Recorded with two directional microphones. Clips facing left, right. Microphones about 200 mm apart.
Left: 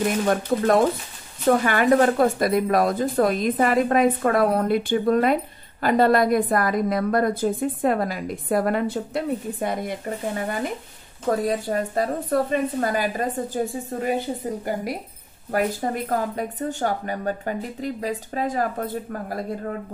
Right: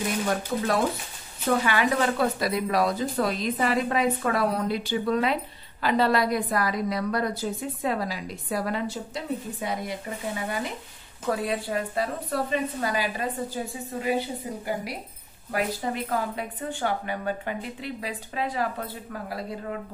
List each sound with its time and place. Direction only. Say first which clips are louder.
0.3 s speech: left 7 dB; 50° left (ahead or behind)